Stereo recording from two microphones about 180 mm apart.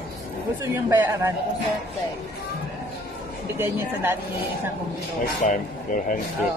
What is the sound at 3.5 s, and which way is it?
Speech, 15° right (ahead or behind).